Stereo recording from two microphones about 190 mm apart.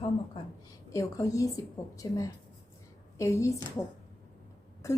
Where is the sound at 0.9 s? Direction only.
15° left (ahead or behind).